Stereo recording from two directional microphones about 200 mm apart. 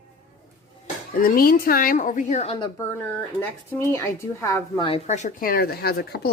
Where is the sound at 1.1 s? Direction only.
45° left (ahead or behind); by 2.7 s 30° left (ahead or behind).